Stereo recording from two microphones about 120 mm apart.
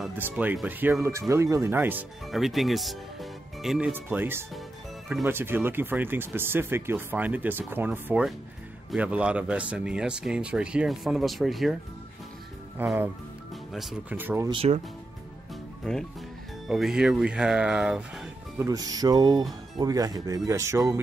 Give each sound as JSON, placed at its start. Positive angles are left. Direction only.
{"t": 0.2, "sound": "speech", "side_deg": -15}
{"t": 2.3, "sound": "speech", "side_deg": 0}
{"t": 3.9, "sound": "speech", "side_deg": -15}
{"t": 12.8, "sound": "speech", "side_deg": -15}
{"t": 14.1, "sound": "speech", "side_deg": -15}
{"t": 15.8, "sound": "speech", "side_deg": 5}
{"t": 18.6, "sound": "music", "side_deg": -30}
{"t": 19.8, "sound": "speech", "side_deg": -30}